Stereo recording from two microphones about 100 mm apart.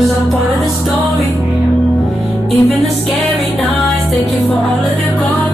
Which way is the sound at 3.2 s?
15° left (ahead or behind).